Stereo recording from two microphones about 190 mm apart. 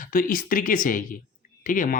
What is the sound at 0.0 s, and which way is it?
Speech, 45° left (ahead or behind).